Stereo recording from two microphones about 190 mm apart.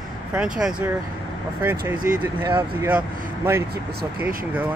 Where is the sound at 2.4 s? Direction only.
20° right (ahead or behind).